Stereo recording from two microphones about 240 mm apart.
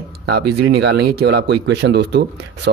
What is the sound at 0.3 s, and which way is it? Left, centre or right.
Speech, right.